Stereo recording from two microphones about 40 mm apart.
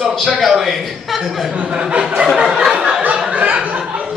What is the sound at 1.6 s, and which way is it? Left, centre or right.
Speech, right.